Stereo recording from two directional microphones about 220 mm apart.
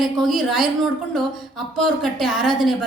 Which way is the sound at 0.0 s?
Centre (ahead or behind).